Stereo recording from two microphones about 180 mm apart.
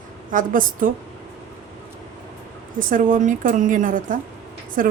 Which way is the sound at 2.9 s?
45° right (ahead or behind).